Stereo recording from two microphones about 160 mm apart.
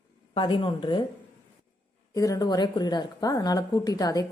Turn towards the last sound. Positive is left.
turn(degrees=25)  # may be behind; listen again after turning